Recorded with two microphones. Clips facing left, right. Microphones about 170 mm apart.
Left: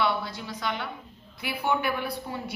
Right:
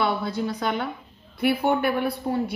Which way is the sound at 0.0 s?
45° right (ahead or behind).